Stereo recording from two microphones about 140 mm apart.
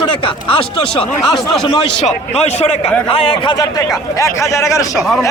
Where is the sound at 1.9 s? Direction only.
50° left (ahead or behind); by 4.8 s 20° left (ahead or behind).